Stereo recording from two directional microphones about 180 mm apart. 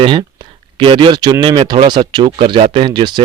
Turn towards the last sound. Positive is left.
turn(degrees=-25)  # may be behind; listen again after turning